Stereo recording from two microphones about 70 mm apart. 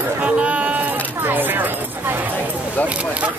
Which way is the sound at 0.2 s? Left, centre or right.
Centre.